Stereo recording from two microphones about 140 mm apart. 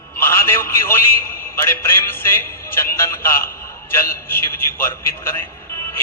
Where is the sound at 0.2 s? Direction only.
15° left (ahead or behind).